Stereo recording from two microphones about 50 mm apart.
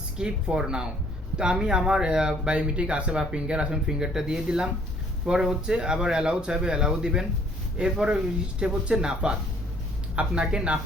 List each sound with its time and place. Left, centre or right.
0.2 s speech: centre